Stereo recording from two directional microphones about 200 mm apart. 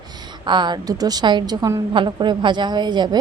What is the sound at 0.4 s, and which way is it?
A woman's voice, 20° right (ahead or behind).